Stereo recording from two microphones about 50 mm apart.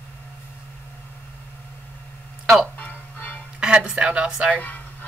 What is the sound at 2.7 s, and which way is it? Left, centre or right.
Music, left.